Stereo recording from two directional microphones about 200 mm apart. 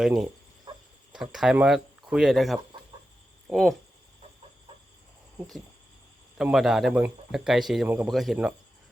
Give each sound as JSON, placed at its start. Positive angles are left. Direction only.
{"t": 0.7, "sound": "a sound", "side_deg": -25}
{"t": 1.1, "sound": "a man's voice", "side_deg": 0}
{"t": 6.3, "sound": "a man's voice", "side_deg": 0}